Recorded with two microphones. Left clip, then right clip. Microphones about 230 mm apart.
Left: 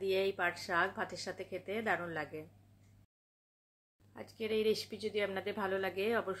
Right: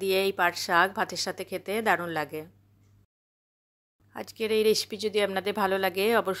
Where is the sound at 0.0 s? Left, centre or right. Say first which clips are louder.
Right 8 dB; right.